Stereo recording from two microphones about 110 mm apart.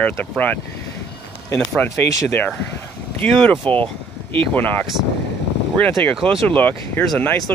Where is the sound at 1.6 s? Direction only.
10° left (ahead or behind).